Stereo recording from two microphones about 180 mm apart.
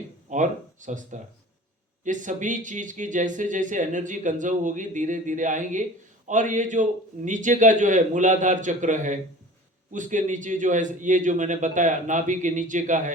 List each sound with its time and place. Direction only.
0.3 s speech: 45° right (ahead or behind)